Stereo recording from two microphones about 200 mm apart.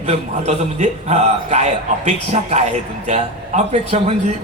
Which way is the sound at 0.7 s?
35° right (ahead or behind).